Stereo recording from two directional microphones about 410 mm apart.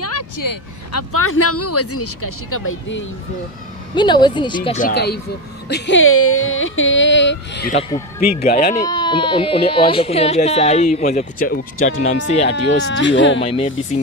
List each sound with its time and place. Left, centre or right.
0.4 s speech: left
0.9 s speech: left
3.9 s speech: centre
12.9 s speech: left
13.4 s speech: centre